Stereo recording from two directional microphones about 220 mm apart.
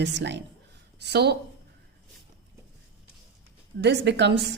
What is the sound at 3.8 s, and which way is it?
Speech, 50° right (ahead or behind).